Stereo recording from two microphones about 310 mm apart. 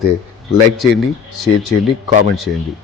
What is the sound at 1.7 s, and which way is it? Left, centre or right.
Speech, right.